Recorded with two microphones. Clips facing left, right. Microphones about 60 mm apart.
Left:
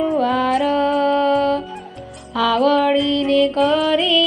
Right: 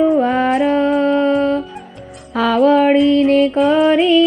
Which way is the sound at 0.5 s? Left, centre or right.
Centre.